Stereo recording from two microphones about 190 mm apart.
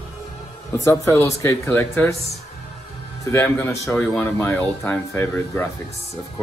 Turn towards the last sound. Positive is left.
turn(degrees=10)  # may be behind; listen again after turning